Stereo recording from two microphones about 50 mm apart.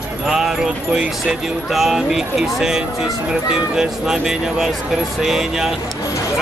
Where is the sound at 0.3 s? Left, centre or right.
Centre.